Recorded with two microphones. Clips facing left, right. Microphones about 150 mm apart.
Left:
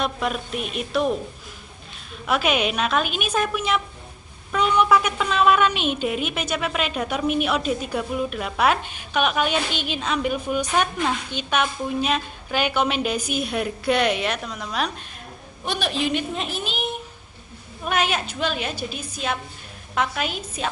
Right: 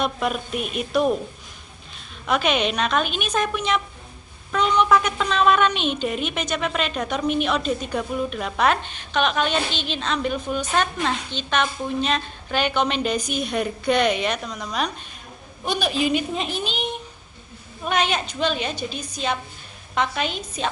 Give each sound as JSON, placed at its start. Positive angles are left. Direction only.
{"t": 0.0, "sound": "a woman's voice", "side_deg": 0}
{"t": 2.2, "sound": "a woman's voice", "side_deg": 5}